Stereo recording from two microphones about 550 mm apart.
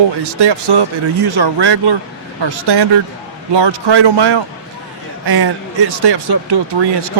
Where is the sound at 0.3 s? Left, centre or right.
Right.